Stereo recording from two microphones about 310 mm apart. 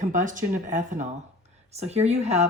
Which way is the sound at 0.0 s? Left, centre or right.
Right.